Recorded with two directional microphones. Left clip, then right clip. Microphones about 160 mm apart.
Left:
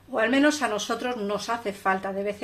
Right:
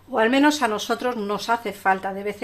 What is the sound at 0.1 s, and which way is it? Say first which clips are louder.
Speech: right 4 dB; 40° right (ahead or behind).